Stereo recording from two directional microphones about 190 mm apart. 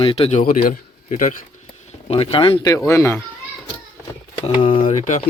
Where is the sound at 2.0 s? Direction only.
30° left (ahead or behind).